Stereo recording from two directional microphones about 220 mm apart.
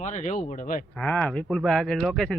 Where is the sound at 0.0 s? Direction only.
30° left (ahead or behind).